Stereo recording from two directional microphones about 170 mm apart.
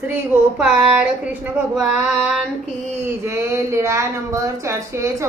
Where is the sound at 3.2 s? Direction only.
15° right (ahead or behind).